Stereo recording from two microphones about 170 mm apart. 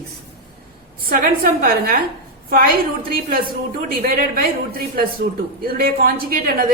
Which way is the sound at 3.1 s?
60° right (ahead or behind).